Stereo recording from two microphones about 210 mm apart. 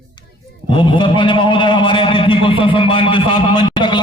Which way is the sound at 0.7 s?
25° left (ahead or behind).